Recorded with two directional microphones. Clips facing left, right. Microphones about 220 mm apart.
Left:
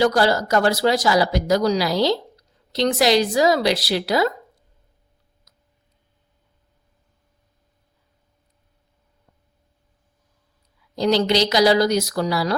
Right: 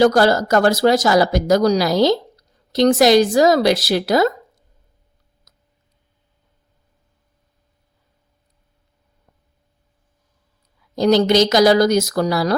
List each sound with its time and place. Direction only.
0.0 s speech: 45° right (ahead or behind)
10.9 s speech: 45° right (ahead or behind)